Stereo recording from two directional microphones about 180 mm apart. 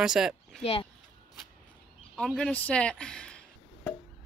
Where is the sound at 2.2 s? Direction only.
5° left (ahead or behind).